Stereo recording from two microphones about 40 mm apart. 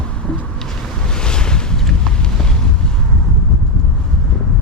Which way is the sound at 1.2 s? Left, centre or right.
Centre.